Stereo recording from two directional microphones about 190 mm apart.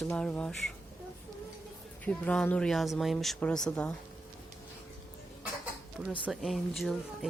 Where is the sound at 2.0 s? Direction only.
5° left (ahead or behind).